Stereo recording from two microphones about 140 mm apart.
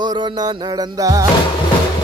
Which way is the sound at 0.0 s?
35° right (ahead or behind).